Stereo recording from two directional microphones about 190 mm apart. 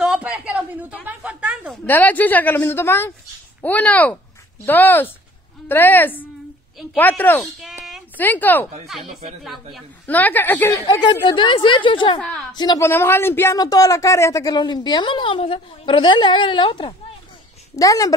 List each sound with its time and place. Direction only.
0.0 s a sound: 5° right (ahead or behind)
1.9 s a woman's voice: 10° left (ahead or behind)
7.6 s a sound: centre (ahead or behind)
8.3 s a woman's voice: 10° left (ahead or behind)
9.8 s a woman's voice: 10° left (ahead or behind); by 12.2 s 25° left (ahead or behind)
12.2 s a woman's voice: 5° left (ahead or behind)
12.5 s a woman's voice: 20° left (ahead or behind)